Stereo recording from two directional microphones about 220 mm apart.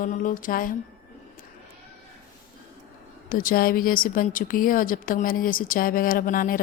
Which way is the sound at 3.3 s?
40° left (ahead or behind).